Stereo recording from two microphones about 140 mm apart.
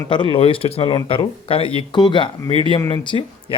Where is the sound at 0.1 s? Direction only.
35° left (ahead or behind).